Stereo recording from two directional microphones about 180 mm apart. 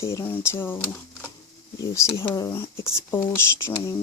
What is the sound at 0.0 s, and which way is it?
Speech, 15° left (ahead or behind).